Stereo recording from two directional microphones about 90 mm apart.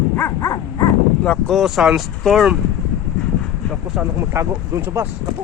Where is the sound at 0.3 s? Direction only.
40° left (ahead or behind).